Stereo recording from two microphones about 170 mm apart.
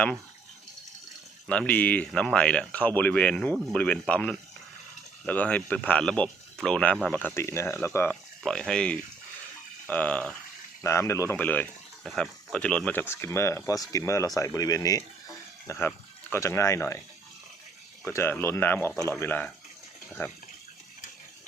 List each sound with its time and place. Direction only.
1.5 s speech: 10° left (ahead or behind)
18.0 s speech: 15° left (ahead or behind)